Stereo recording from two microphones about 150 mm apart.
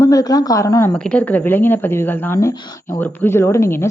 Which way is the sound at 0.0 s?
25° left (ahead or behind).